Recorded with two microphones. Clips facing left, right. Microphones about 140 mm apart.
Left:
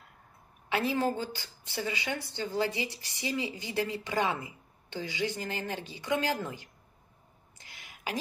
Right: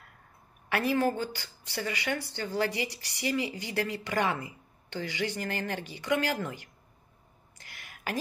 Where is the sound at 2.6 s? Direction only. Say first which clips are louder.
Right 3 dB; 65° right (ahead or behind).